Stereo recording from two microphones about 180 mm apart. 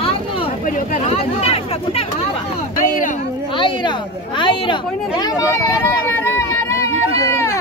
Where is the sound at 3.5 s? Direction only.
30° left (ahead or behind).